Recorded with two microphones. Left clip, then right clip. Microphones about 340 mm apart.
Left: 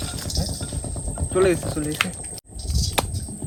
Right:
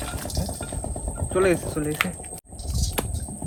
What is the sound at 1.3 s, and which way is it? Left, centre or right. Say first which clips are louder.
Speech: left 2 dB; centre.